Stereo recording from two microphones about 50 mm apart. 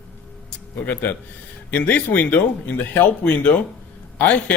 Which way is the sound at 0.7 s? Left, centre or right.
Left.